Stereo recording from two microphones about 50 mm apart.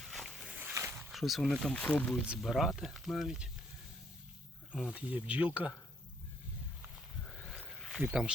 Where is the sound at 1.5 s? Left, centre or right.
Centre.